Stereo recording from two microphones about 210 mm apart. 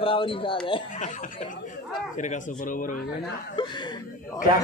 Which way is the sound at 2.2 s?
35° left (ahead or behind).